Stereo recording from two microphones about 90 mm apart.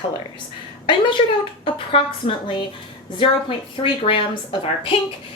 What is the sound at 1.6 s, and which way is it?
A woman's voice, 75° left (ahead or behind).